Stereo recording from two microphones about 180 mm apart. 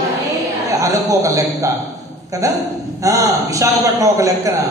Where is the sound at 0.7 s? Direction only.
20° right (ahead or behind).